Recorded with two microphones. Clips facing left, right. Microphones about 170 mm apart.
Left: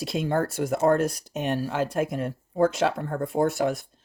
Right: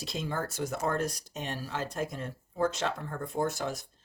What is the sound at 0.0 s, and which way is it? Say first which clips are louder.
Speech: left 9 dB; 60° left (ahead or behind).